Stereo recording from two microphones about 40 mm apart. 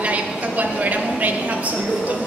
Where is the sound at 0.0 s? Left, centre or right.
Right.